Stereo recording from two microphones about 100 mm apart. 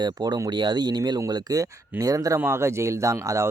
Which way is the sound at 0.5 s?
50° right (ahead or behind).